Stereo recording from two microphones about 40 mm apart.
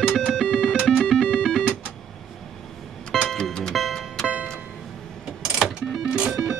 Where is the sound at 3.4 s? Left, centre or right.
Centre.